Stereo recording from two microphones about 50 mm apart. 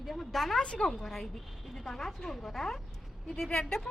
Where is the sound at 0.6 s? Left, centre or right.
Centre.